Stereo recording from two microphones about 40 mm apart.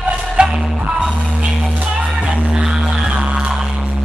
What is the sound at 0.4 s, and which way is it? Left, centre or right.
Music, right.